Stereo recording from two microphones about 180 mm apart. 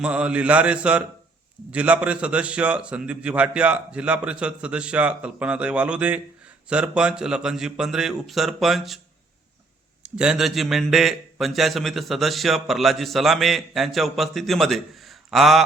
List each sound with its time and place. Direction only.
0.0 s a man's voice: 5° right (ahead or behind)
10.0 s a man's voice: 5° right (ahead or behind)